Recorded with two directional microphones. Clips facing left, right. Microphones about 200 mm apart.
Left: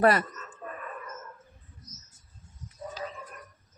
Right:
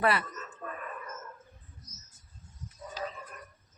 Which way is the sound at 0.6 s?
10° left (ahead or behind).